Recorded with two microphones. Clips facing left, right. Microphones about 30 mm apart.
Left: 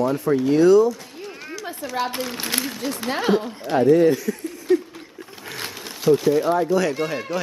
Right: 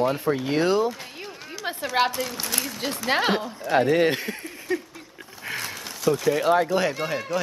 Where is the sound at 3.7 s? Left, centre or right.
Right.